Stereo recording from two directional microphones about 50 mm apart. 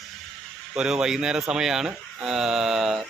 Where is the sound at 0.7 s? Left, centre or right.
Centre.